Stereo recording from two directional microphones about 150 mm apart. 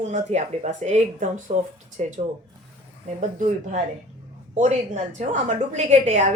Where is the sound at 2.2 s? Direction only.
45° right (ahead or behind).